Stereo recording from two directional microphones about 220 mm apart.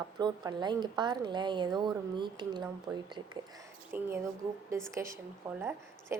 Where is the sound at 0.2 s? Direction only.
20° right (ahead or behind).